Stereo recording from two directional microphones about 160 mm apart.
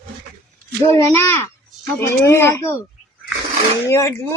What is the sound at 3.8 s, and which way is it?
Speech, 20° left (ahead or behind).